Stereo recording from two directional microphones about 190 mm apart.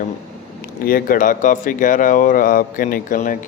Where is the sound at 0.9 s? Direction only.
50° left (ahead or behind).